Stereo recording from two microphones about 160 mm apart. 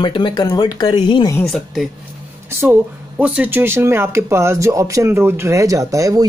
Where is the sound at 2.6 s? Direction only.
10° right (ahead or behind).